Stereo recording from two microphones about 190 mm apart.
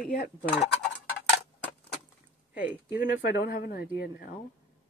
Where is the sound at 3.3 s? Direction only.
50° left (ahead or behind).